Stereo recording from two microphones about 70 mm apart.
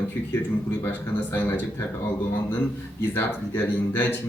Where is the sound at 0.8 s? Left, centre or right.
Left.